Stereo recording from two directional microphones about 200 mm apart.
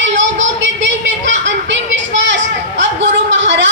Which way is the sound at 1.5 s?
65° right (ahead or behind).